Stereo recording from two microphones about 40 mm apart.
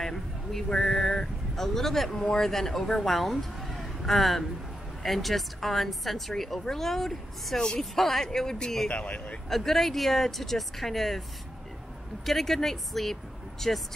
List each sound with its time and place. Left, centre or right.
0.0 s a sound: centre
0.7 s speech: centre
8.8 s speech: left
9.5 s speech: centre
12.3 s speech: centre